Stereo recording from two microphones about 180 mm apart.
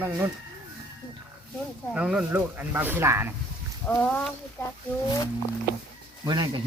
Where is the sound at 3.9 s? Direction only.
5° left (ahead or behind).